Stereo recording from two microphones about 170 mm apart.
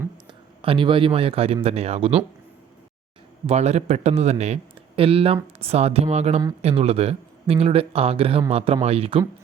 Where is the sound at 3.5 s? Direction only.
40° right (ahead or behind).